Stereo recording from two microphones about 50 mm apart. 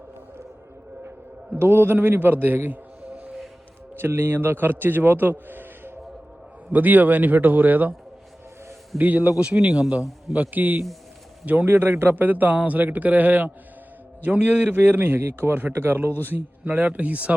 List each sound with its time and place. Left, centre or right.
1.5 s a man's voice: right
3.9 s a man's voice: right
9.0 s a man's voice: right
10.3 s a man's voice: right
12.1 s a man's voice: right